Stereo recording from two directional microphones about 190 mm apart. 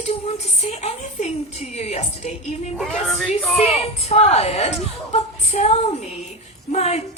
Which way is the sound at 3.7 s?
30° left (ahead or behind).